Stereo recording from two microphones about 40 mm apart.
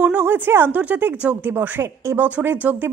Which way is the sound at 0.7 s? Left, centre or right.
Right.